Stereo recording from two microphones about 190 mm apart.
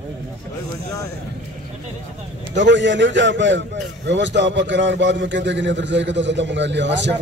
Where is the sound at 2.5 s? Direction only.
70° right (ahead or behind).